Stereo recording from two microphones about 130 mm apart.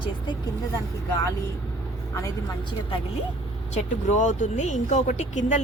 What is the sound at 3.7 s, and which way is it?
Speech, 70° left (ahead or behind).